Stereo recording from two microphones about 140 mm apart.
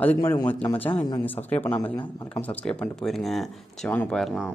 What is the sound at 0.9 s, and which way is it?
Speech, 30° left (ahead or behind).